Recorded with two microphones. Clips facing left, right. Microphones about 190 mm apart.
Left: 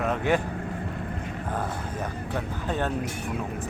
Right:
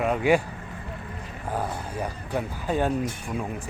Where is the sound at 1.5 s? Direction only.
10° right (ahead or behind).